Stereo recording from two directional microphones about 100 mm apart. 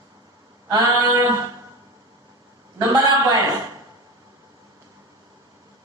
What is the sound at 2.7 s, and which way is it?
Speech, 40° right (ahead or behind).